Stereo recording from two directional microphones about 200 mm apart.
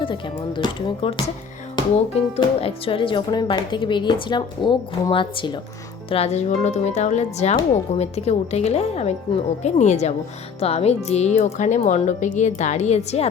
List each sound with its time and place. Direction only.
0.0 s speech: 25° left (ahead or behind)